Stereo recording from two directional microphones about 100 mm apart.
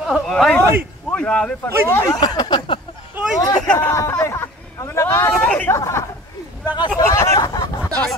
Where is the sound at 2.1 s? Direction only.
45° left (ahead or behind).